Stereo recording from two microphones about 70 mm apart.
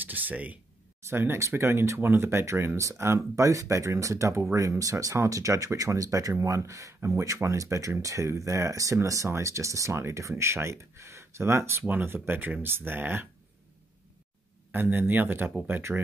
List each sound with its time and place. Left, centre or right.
0.0 s speech: right
14.7 s speech: right